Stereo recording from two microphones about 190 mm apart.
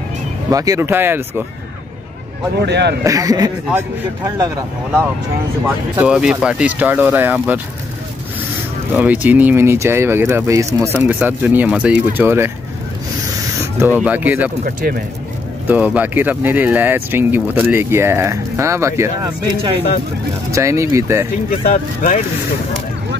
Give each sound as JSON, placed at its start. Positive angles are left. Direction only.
{"t": 0.5, "sound": "speech", "side_deg": -20}
{"t": 2.6, "sound": "speech", "side_deg": -60}
{"t": 3.0, "sound": "speech", "side_deg": -20}
{"t": 5.9, "sound": "speech", "side_deg": -5}
{"t": 8.9, "sound": "speech", "side_deg": -10}
{"t": 13.7, "sound": "speech", "side_deg": -5}
{"t": 14.6, "sound": "speech", "side_deg": -50}
{"t": 15.6, "sound": "speech", "side_deg": -10}
{"t": 20.5, "sound": "speech", "side_deg": -15}
{"t": 21.5, "sound": "speech", "side_deg": 45}